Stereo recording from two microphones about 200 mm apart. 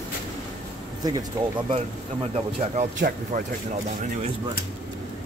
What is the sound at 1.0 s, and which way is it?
Speech, 20° right (ahead or behind).